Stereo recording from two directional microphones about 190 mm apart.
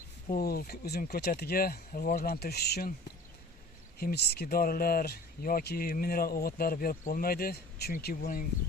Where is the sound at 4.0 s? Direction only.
55° left (ahead or behind).